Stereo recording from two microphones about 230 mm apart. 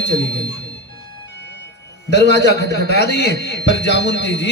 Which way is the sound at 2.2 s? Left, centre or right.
Left.